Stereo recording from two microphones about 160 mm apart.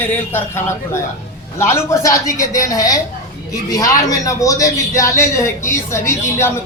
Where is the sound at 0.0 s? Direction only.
10° left (ahead or behind).